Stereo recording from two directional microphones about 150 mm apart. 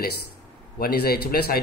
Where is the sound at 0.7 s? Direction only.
90° left.